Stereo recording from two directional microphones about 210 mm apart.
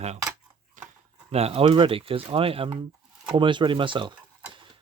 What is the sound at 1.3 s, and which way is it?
Speech, 30° right (ahead or behind).